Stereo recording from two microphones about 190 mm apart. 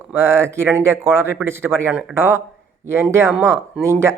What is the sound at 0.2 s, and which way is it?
Speech, 15° right (ahead or behind).